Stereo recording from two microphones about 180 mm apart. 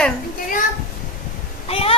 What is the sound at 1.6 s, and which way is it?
Speech, 30° left (ahead or behind).